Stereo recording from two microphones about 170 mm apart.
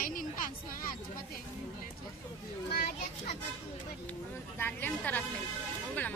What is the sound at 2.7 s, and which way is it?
Children playing, 60° left (ahead or behind).